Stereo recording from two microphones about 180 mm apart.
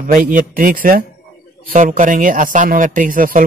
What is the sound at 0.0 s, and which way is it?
A man's voice, 45° right (ahead or behind).